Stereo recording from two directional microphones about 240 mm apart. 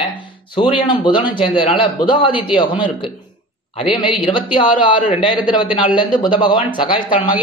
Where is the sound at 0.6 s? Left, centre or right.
Left.